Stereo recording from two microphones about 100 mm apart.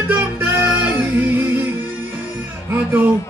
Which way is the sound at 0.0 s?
20° right (ahead or behind).